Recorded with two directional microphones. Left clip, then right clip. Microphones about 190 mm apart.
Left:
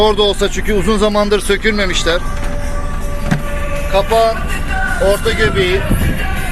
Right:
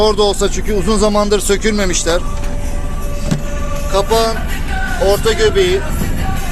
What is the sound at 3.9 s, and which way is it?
Speech, centre (ahead or behind).